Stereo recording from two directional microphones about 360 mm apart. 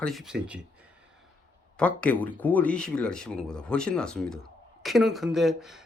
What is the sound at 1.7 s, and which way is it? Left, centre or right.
Speech, centre.